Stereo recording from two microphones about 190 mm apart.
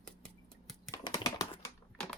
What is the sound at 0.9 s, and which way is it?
Typing, 20° left (ahead or behind).